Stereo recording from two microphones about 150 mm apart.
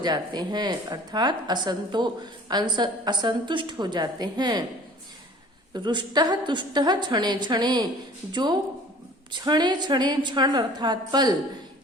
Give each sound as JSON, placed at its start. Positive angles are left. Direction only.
{"t": 0.0, "sound": "a woman's voice", "side_deg": -30}
{"t": 5.7, "sound": "a woman's voice", "side_deg": -30}